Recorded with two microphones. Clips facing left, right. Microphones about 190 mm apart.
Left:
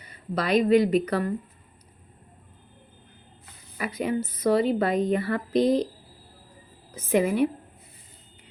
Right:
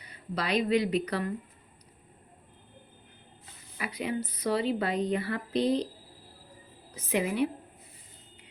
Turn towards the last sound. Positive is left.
turn(degrees=45)  # may be behind; listen again after turning